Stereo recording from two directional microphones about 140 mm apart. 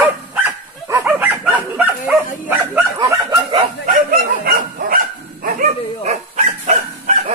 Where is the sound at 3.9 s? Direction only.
90° right.